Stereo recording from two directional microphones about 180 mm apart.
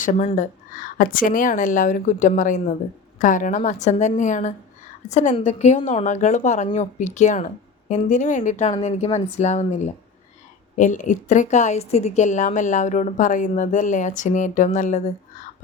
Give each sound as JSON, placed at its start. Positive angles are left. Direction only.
{"t": 0.0, "sound": "a woman's voice", "side_deg": 40}